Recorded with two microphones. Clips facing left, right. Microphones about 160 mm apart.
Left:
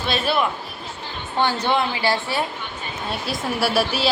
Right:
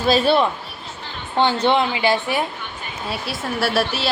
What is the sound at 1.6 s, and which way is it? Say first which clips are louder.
Speech: right 3 dB; 20° right (ahead or behind).